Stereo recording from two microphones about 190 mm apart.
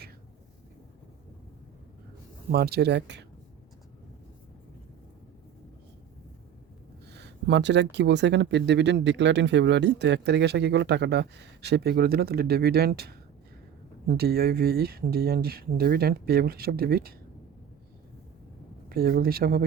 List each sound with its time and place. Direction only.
2.5 s speech: 55° right (ahead or behind)
7.1 s speech: 60° right (ahead or behind)
18.9 s speech: 50° right (ahead or behind)